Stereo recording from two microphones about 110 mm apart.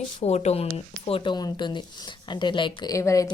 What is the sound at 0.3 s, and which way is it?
Speech, 80° left.